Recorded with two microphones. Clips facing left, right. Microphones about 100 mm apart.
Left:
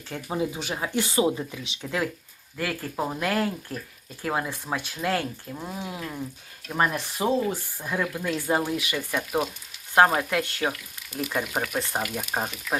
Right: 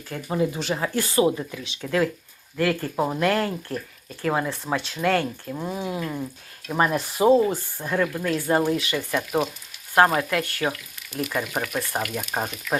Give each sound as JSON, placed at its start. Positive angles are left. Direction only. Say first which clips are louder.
{"t": 0.3, "sound": "frying", "louder": "right 4 dB", "side_deg": 10}
{"t": 0.9, "sound": "speech", "louder": "right 2 dB", "side_deg": 20}
{"t": 1.4, "sound": "frying", "louder": "right 2 dB", "side_deg": 20}
{"t": 2.6, "sound": "speech", "louder": "right 7 dB", "side_deg": 5}
{"t": 2.9, "sound": "speech", "louder": "right 4 dB", "side_deg": -5}
{"t": 3.2, "sound": "speech", "louder": "right 2 dB", "side_deg": 5}
{"t": 4.7, "sound": "frying", "louder": "right 3 dB", "side_deg": 5}
{"t": 5.0, "sound": "speech", "louder": "right 5 dB", "side_deg": 5}
{"t": 5.5, "sound": "speech", "louder": "right 5 dB", "side_deg": -5}
{"t": 6.7, "sound": "speech", "louder": "right 2 dB", "side_deg": -15}
{"t": 6.9, "sound": "speech", "louder": "right 7 dB", "side_deg": -35}
{"t": 7.9, "sound": "speech", "louder": "right 4 dB", "side_deg": 5}
{"t": 8.7, "sound": "frying", "louder": "right 3 dB", "side_deg": 10}